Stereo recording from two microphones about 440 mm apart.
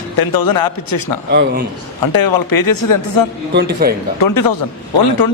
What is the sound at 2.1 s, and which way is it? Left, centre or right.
Speech, left.